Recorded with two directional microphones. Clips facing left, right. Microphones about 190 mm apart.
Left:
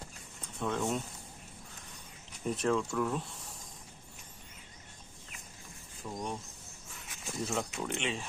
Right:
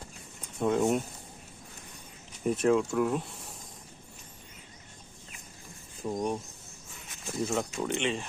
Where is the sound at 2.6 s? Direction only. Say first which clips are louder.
Right 5 dB; 10° right (ahead or behind).